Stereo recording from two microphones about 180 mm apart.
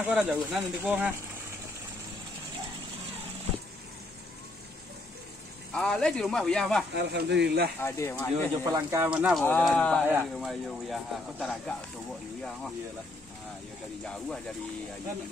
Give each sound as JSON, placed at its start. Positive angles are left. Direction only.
{"t": 0.0, "sound": "speech", "side_deg": -5}
{"t": 5.7, "sound": "speech", "side_deg": 5}
{"t": 6.9, "sound": "speech", "side_deg": -70}
{"t": 7.8, "sound": "speech", "side_deg": 15}
{"t": 8.6, "sound": "speech", "side_deg": -15}
{"t": 9.4, "sound": "speech", "side_deg": 10}
{"t": 14.0, "sound": "speech", "side_deg": 5}